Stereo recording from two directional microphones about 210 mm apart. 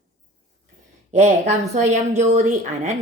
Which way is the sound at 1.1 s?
35° right (ahead or behind).